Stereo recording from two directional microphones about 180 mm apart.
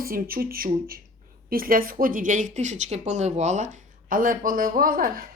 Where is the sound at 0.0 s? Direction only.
55° right (ahead or behind).